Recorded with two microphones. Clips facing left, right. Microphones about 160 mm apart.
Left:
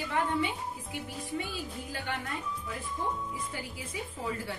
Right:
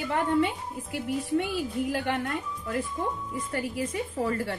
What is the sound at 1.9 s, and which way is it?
Speech, 75° right (ahead or behind).